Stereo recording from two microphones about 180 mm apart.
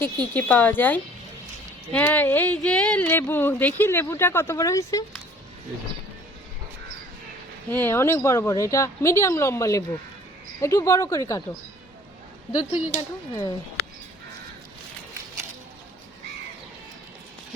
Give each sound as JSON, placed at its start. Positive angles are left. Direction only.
{"t": 0.0, "sound": "speech", "side_deg": 10}
{"t": 7.7, "sound": "speech", "side_deg": 10}
{"t": 12.5, "sound": "speech", "side_deg": 25}